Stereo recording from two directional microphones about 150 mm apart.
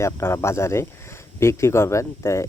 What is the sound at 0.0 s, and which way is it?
Speech, 15° left (ahead or behind).